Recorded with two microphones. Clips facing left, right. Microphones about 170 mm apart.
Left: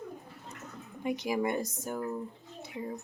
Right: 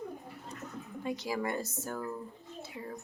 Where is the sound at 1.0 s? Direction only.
20° left (ahead or behind).